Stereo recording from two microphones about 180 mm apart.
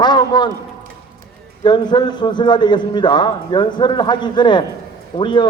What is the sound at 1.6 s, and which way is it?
Speech, 25° left (ahead or behind).